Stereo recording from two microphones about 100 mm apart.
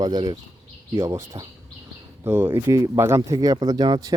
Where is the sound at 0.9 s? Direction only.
35° right (ahead or behind).